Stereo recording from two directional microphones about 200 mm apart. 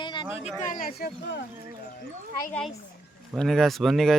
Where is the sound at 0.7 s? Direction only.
50° left (ahead or behind).